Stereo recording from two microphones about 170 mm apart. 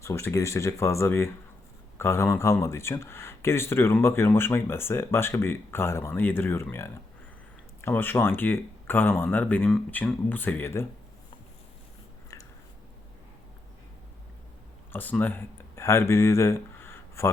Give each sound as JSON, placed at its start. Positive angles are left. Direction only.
{"t": 0.0, "sound": "speech", "side_deg": 15}
{"t": 12.3, "sound": "biting", "side_deg": 20}
{"t": 14.9, "sound": "speech", "side_deg": 10}